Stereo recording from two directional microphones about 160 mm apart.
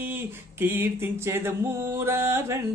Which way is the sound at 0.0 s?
15° right (ahead or behind).